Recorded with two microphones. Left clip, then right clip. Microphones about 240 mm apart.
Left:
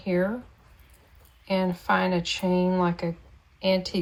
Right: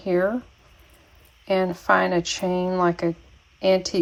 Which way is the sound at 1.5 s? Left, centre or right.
Right.